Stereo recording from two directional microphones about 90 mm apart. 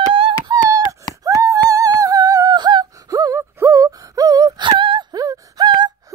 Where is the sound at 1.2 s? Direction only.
40° right (ahead or behind).